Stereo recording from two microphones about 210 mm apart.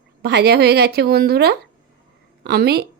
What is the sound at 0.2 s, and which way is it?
A woman's voice, 50° right (ahead or behind).